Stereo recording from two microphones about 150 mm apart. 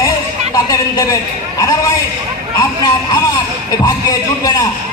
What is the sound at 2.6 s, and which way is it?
Speech, 30° left (ahead or behind).